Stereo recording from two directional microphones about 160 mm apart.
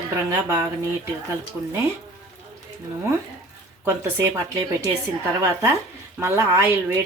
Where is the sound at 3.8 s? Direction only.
15° right (ahead or behind).